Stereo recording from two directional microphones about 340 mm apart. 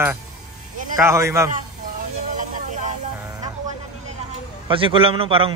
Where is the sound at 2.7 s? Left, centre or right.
Right.